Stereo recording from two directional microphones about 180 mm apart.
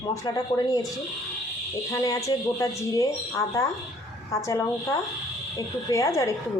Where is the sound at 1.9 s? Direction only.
20° left (ahead or behind).